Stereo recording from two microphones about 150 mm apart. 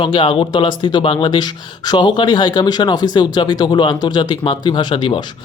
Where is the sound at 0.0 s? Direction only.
35° left (ahead or behind).